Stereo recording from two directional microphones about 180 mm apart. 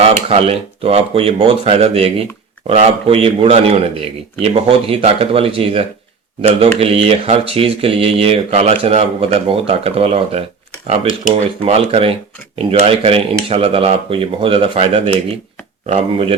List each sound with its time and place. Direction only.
0.0 s speech: 35° right (ahead or behind)
11.6 s speech: 35° right (ahead or behind)